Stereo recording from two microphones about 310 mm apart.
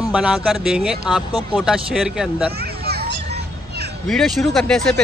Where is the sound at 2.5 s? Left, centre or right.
Right.